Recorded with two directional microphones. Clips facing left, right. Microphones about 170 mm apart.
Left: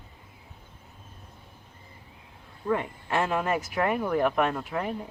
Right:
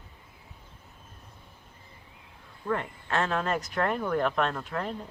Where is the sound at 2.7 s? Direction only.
10° left (ahead or behind).